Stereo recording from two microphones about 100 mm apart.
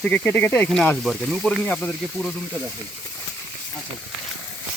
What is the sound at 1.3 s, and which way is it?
Speech, 5° left (ahead or behind).